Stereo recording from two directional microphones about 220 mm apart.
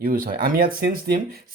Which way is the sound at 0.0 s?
40° right (ahead or behind).